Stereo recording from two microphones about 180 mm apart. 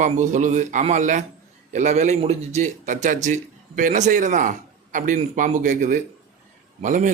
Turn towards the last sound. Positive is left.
turn(degrees=-45)  # may be behind; listen again after turning